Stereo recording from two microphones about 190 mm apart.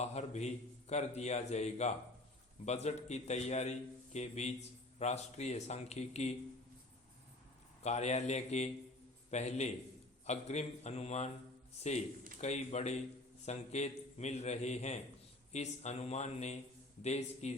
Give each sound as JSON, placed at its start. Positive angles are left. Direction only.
{"t": 0.0, "sound": "a man's voice", "side_deg": 35}
{"t": 7.9, "sound": "a man's voice", "side_deg": 35}